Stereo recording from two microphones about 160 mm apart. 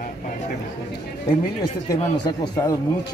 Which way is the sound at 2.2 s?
25° left (ahead or behind).